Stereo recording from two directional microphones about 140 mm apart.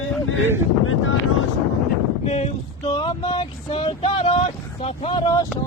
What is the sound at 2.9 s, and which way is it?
Speech, 35° left (ahead or behind).